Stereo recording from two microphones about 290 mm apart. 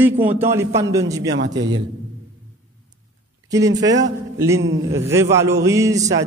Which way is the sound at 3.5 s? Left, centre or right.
Centre.